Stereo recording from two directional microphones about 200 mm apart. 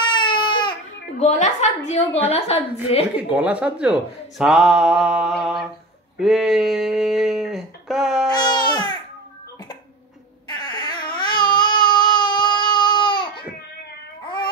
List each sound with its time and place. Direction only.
0.0 s baby cry: 25° left (ahead or behind)
1.2 s a woman's voice: 35° left (ahead or behind)
3.2 s speech: 10° right (ahead or behind)
8.3 s babbling: 20° left (ahead or behind)
10.5 s baby cry: 20° left (ahead or behind)